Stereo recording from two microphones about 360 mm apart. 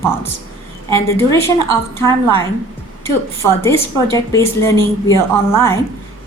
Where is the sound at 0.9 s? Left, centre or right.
Centre.